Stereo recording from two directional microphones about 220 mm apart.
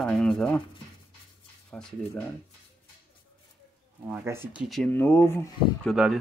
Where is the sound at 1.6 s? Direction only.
5° left (ahead or behind).